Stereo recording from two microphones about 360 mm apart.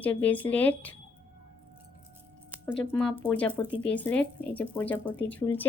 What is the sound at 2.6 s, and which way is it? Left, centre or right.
Speech, centre.